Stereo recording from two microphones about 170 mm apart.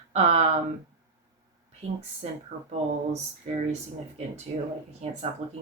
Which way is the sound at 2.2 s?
40° right (ahead or behind).